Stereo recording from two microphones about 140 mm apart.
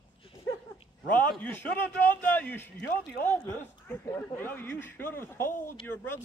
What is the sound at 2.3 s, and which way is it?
Speech, 10° left (ahead or behind).